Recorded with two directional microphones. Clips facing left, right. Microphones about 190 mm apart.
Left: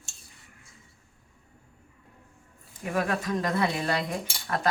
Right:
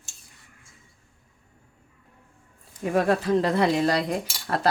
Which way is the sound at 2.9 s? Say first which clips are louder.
Right 7 dB; 35° right (ahead or behind).